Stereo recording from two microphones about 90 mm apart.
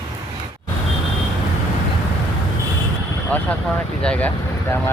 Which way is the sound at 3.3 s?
15° left (ahead or behind).